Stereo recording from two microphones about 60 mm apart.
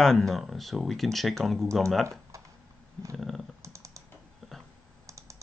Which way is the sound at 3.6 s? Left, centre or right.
Right.